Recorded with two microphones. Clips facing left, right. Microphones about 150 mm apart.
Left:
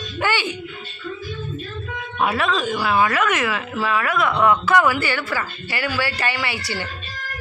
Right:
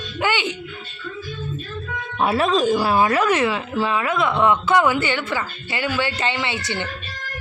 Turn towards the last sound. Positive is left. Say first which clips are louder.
# right 1 dB
turn(degrees=-20)  # may be behind; listen again after turning